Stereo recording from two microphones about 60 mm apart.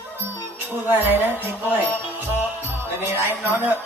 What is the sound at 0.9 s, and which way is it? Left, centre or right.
Speech, right.